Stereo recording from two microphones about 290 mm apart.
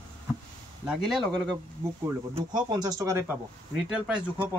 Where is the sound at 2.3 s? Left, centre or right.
Centre.